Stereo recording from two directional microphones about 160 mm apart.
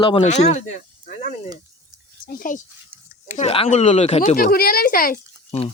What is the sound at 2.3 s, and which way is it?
Speech, 55° left (ahead or behind).